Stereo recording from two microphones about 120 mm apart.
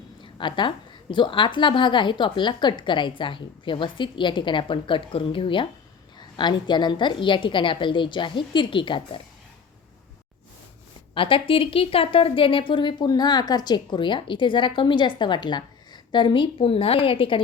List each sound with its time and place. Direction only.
0.2 s a sound: 40° left (ahead or behind)
1.1 s speech: 40° left (ahead or behind)
11.1 s speech: 45° left (ahead or behind)